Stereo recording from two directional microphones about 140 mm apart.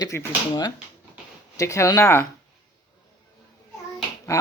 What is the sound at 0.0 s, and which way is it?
Speech, 20° left (ahead or behind).